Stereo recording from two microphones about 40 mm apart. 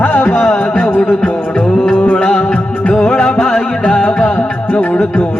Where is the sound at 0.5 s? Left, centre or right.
Left.